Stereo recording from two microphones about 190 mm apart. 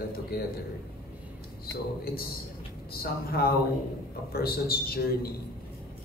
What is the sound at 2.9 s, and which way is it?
A man's voice, 55° left (ahead or behind).